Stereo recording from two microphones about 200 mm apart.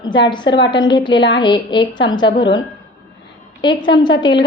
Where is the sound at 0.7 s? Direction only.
20° left (ahead or behind).